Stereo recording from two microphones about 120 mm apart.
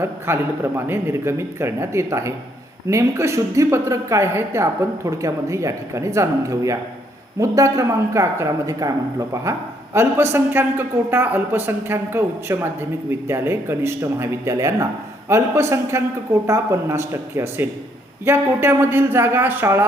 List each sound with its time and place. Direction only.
0.0 s speech: 20° right (ahead or behind)